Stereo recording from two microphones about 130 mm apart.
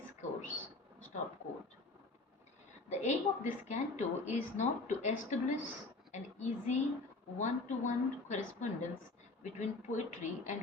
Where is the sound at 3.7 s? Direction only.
65° left (ahead or behind).